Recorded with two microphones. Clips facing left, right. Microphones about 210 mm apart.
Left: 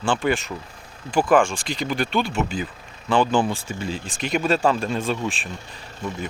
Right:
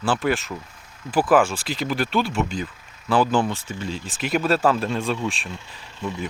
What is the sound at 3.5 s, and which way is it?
Speech, 10° left (ahead or behind).